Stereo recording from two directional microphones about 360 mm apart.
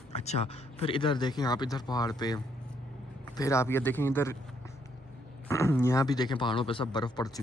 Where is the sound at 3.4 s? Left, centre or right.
Centre.